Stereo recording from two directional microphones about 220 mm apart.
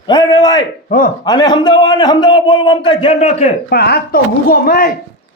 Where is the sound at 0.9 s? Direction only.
40° left (ahead or behind).